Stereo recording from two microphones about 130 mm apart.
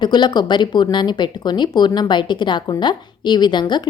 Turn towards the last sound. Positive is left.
turn(degrees=35)  # may be behind; listen again after turning